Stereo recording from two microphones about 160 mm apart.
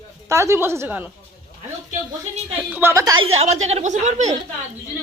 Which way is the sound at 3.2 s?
40° right (ahead or behind).